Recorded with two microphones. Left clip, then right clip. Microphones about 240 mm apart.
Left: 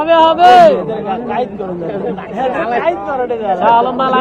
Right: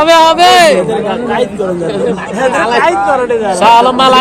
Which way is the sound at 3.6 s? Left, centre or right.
Right.